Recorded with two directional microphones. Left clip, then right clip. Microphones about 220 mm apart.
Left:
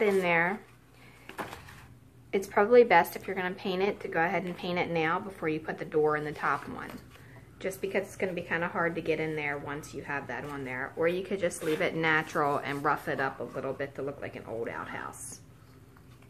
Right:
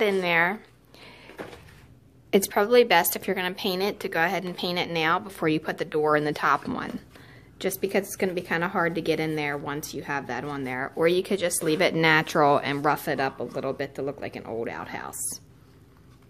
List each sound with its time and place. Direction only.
0.0 s a woman's voice: 50° right (ahead or behind)
2.3 s a woman's voice: 50° right (ahead or behind)